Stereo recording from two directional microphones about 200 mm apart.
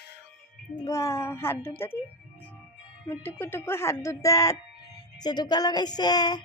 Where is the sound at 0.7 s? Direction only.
15° left (ahead or behind).